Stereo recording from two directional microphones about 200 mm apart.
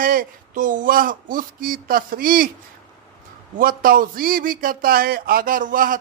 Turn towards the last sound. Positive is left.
turn(degrees=-40)  # may be behind; listen again after turning